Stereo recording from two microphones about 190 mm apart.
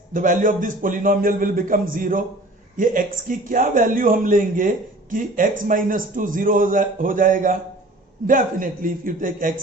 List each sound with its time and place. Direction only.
0.1 s a man's voice: 45° right (ahead or behind)